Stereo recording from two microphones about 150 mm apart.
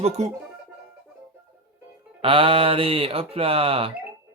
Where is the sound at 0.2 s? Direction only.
50° right (ahead or behind).